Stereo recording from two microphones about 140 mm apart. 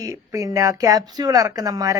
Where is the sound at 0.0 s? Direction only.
20° right (ahead or behind).